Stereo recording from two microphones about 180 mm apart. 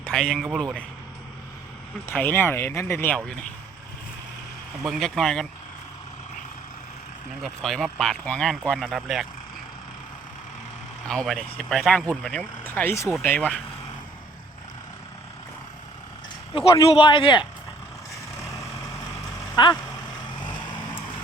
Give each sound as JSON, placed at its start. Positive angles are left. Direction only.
{"t": 0.1, "sound": "speech", "side_deg": 5}
{"t": 2.0, "sound": "speech", "side_deg": 10}
{"t": 4.8, "sound": "speech", "side_deg": 0}
{"t": 7.4, "sound": "speech", "side_deg": 0}
{"t": 11.1, "sound": "speech", "side_deg": 0}
{"t": 16.6, "sound": "speech", "side_deg": 30}
{"t": 18.9, "sound": "vehicle", "side_deg": 20}